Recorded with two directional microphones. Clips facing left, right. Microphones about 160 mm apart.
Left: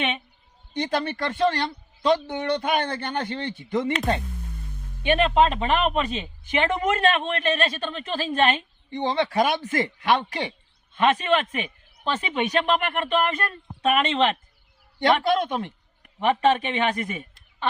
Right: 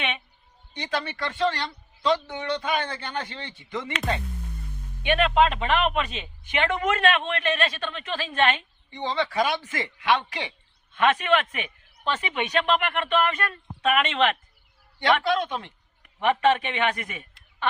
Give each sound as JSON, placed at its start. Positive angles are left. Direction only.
{"t": 0.7, "sound": "a man's voice", "side_deg": 50}
{"t": 5.0, "sound": "speech", "side_deg": 35}
{"t": 8.9, "sound": "speech", "side_deg": 55}
{"t": 10.9, "sound": "speech", "side_deg": 30}
{"t": 14.9, "sound": "a man's voice", "side_deg": 45}